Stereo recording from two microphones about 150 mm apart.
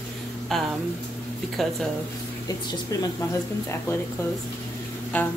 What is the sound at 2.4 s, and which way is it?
Speech, 25° left (ahead or behind).